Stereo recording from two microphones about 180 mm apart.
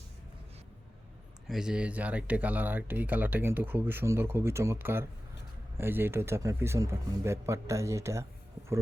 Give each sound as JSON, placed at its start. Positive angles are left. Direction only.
{"t": 1.5, "sound": "speech", "side_deg": -5}